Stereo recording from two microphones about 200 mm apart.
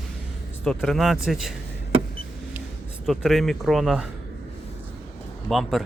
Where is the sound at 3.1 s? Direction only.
Centre (ahead or behind).